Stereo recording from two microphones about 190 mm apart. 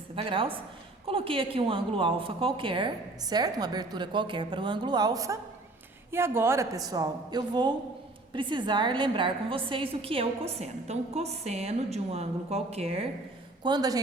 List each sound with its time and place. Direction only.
0.2 s a woman's voice: 30° right (ahead or behind)
13.6 s a woman's voice: 20° right (ahead or behind)